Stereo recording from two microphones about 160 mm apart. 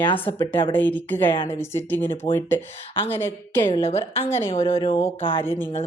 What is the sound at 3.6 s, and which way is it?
Speech, 35° left (ahead or behind).